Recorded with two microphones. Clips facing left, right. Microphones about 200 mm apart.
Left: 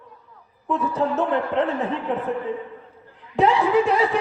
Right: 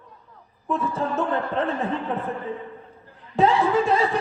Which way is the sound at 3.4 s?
20° left (ahead or behind).